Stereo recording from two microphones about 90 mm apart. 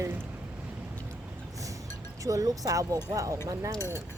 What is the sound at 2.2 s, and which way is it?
Speech, 40° right (ahead or behind).